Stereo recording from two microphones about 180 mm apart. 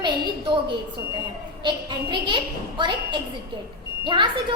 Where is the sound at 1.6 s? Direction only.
25° right (ahead or behind).